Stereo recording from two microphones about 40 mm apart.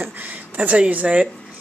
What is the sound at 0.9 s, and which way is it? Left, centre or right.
Speech, right.